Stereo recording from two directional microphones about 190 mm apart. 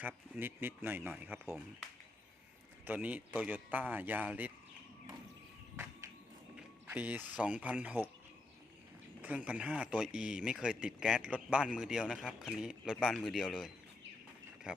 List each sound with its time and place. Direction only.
0.0 s a man's voice: 10° right (ahead or behind)
2.8 s a man's voice: 10° right (ahead or behind)
5.7 s a sound: 15° right (ahead or behind)
6.9 s a man's voice: 10° right (ahead or behind)
9.2 s speech: 5° right (ahead or behind)